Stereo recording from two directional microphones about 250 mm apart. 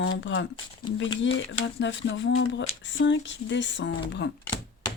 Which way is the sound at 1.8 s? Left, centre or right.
Left.